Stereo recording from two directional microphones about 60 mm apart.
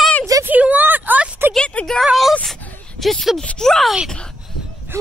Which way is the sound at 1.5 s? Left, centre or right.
Centre.